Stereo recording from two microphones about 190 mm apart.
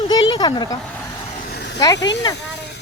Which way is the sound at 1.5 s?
60° left (ahead or behind).